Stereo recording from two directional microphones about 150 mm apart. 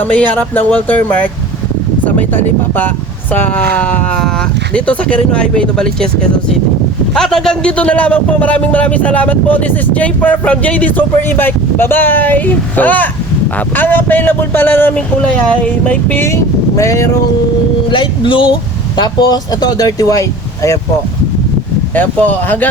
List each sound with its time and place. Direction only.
0.0 s a man's voice: 10° left (ahead or behind)
7.1 s a man's voice: 5° left (ahead or behind); by 17.1 s 20° left (ahead or behind)
17.9 s speech: 35° left (ahead or behind)
21.9 s a man's voice: 10° left (ahead or behind)